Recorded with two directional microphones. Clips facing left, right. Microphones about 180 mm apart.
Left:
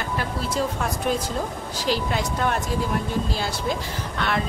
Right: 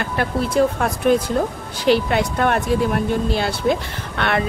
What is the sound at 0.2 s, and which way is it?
Speech, 60° right (ahead or behind).